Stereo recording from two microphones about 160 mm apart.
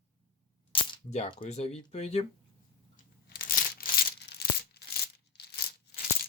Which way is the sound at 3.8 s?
65° left (ahead or behind).